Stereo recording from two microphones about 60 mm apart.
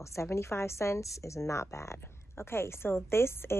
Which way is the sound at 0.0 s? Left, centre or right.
Left.